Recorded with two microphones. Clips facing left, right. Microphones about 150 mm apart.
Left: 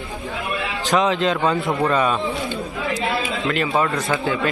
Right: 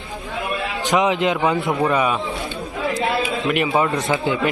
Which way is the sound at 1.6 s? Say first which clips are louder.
Even; 15° right (ahead or behind).